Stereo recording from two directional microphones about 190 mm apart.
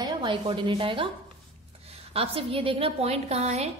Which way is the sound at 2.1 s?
30° right (ahead or behind).